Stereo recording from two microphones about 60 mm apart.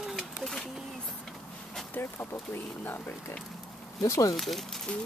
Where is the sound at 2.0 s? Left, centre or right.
Left.